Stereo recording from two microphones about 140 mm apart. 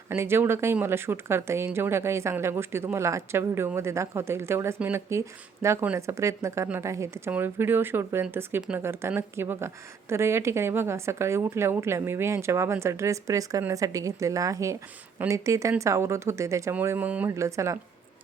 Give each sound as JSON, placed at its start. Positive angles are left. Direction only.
{"t": 0.1, "sound": "a woman's voice", "side_deg": -15}
{"t": 17.3, "sound": "speech", "side_deg": -20}